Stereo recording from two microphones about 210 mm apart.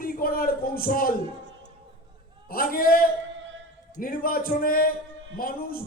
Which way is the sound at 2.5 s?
45° left (ahead or behind).